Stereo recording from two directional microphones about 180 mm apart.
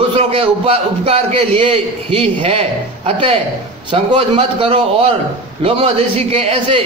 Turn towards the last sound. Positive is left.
turn(degrees=-35)  # may be behind; listen again after turning